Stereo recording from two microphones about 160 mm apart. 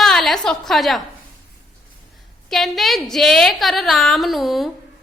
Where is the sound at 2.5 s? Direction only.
Centre (ahead or behind).